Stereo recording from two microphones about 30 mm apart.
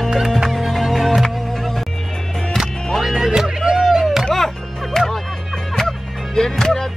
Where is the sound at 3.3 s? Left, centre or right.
Right.